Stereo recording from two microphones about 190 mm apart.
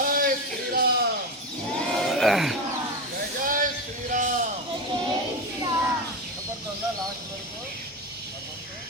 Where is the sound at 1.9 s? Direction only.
Centre (ahead or behind).